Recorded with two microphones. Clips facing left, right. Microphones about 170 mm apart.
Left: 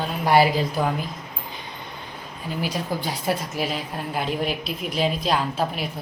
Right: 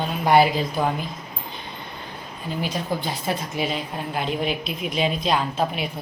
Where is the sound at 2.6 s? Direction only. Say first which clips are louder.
Even; 10° left (ahead or behind).